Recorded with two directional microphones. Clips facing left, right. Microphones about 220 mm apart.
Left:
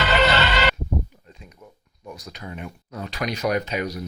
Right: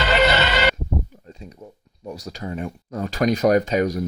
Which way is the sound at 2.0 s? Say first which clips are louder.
Right 6 dB; 40° right (ahead or behind).